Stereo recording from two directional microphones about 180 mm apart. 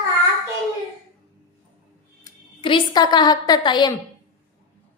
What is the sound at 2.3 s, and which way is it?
A woman's voice, 25° left (ahead or behind).